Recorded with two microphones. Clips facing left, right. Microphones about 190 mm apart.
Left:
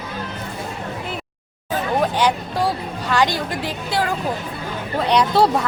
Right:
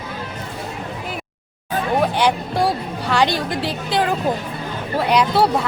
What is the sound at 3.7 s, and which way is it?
Speech, 15° right (ahead or behind).